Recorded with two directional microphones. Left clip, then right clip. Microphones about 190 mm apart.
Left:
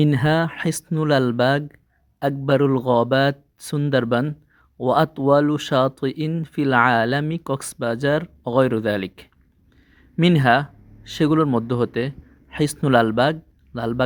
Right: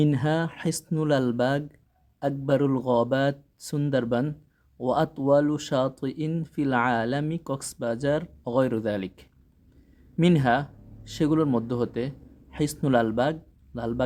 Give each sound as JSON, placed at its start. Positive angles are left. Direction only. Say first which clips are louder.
{"t": 0.0, "sound": "speech", "louder": "left 6 dB", "side_deg": 25}